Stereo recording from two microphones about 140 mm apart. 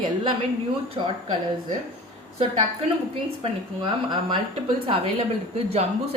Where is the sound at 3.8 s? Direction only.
35° right (ahead or behind).